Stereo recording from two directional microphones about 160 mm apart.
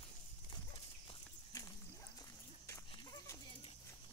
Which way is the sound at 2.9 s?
25° left (ahead or behind).